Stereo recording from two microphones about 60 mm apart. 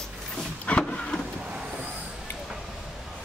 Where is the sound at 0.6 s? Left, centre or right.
Centre.